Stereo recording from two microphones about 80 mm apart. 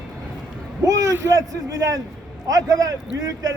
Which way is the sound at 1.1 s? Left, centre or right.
Right.